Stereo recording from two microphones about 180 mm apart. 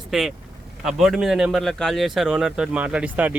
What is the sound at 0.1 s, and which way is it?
A man's voice, centre (ahead or behind).